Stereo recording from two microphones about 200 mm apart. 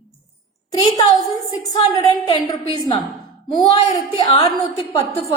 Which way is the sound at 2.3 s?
25° left (ahead or behind).